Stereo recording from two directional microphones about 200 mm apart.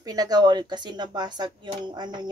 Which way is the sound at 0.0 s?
20° right (ahead or behind).